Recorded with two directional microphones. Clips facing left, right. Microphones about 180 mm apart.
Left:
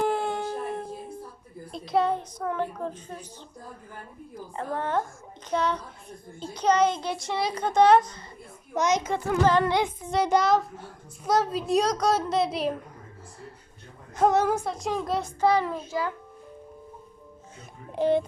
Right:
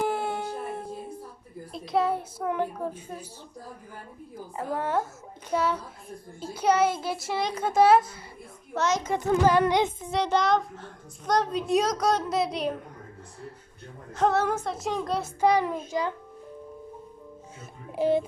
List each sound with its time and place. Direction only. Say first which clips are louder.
0.0 s howl: left 2 dB; 5° right (ahead or behind)
1.7 s a child's voice: left 1 dB; centre (ahead or behind)
4.5 s a child's voice: even; 5° right (ahead or behind)
8.7 s a child's voice: left 2 dB; 15° left (ahead or behind)
9.1 s a child's voice: right 3 dB; 20° right (ahead or behind)
10.2 s a child's voice: left 1 dB; 5° left (ahead or behind)
14.2 s a child's voice: left 2 dB; 10° left (ahead or behind)
15.4 s a child's voice: right 1 dB; 15° right (ahead or behind)
17.9 s a child's voice: left 1 dB; 5° right (ahead or behind)